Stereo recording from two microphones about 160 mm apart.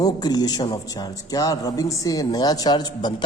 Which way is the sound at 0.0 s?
25° left (ahead or behind).